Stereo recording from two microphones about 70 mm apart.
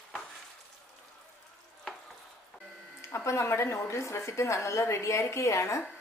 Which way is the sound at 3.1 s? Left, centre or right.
Left.